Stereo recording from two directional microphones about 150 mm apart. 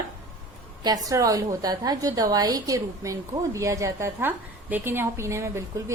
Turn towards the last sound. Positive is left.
turn(degrees=-20)  # may be behind; listen again after turning